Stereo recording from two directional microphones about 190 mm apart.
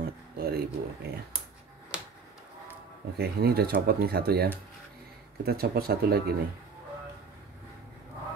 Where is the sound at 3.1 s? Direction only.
55° right (ahead or behind).